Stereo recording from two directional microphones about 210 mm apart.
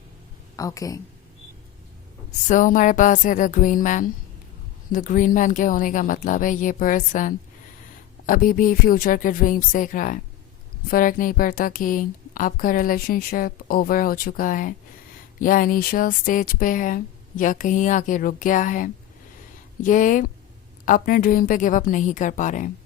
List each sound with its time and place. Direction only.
0.5 s speech: 15° left (ahead or behind)
2.5 s a woman's voice: 40° left (ahead or behind)